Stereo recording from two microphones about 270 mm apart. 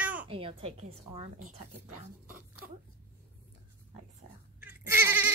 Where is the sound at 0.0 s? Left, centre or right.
Centre.